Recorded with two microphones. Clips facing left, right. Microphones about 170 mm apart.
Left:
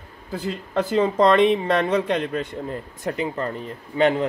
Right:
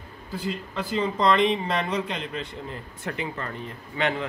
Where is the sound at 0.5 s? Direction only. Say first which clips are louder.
Left 6 dB; 45° left (ahead or behind).